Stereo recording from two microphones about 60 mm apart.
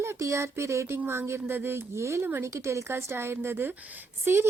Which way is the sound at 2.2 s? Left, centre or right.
Right.